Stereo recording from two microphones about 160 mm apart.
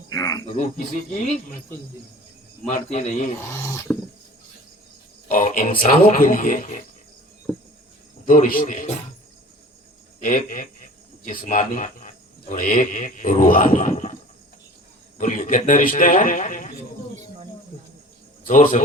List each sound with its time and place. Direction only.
0.1 s a sound: 20° left (ahead or behind)
0.4 s speech: 50° left (ahead or behind)
2.6 s speech: 50° left (ahead or behind)
3.5 s speech: 15° left (ahead or behind)
5.3 s speech: 55° left (ahead or behind)
8.3 s speech: 60° left (ahead or behind)
10.2 s speech: 55° left (ahead or behind)
15.2 s speech: 55° left (ahead or behind)
18.4 s speech: 55° left (ahead or behind)